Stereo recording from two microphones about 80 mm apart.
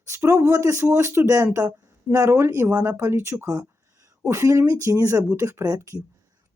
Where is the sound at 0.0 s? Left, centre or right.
Right.